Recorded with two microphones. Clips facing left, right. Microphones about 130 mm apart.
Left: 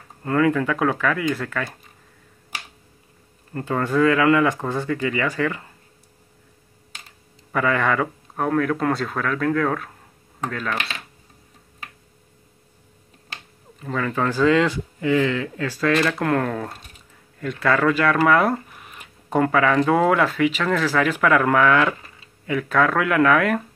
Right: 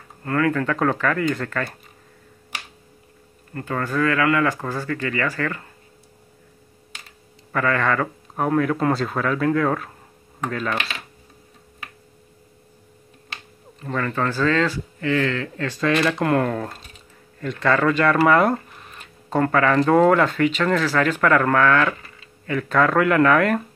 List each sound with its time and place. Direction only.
0.2 s speech: 15° left (ahead or behind)
3.5 s speech: 20° left (ahead or behind)
7.5 s speech: 15° left (ahead or behind)
8.4 s speech: 5° right (ahead or behind)
13.7 s speech: 5° left (ahead or behind)